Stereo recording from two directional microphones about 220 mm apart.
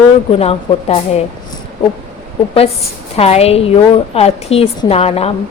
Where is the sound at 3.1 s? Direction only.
30° left (ahead or behind).